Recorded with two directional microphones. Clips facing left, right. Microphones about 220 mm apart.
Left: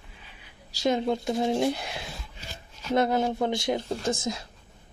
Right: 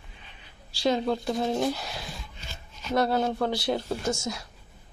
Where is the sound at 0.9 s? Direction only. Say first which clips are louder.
Even; 20° left (ahead or behind).